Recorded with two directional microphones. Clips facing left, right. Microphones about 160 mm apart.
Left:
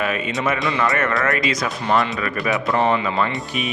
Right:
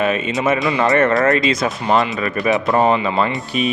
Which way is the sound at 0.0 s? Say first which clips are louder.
Right 4 dB; 25° right (ahead or behind).